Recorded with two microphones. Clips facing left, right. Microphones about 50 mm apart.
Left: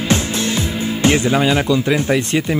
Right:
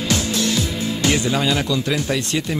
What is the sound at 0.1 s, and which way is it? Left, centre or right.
Speech, left.